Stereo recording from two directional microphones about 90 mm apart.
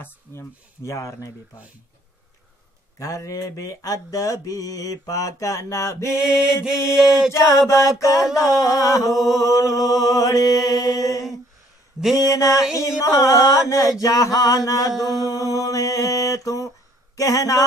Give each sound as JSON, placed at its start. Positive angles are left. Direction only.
{"t": 0.0, "sound": "mantra", "side_deg": 30}
{"t": 3.0, "sound": "mantra", "side_deg": 35}
{"t": 6.4, "sound": "mantra", "side_deg": -10}
{"t": 7.3, "sound": "mantra", "side_deg": 35}